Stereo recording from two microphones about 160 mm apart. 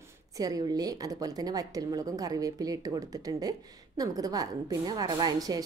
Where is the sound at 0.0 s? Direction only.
20° right (ahead or behind).